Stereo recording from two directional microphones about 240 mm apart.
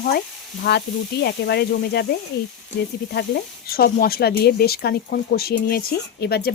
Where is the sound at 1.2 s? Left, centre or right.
Left.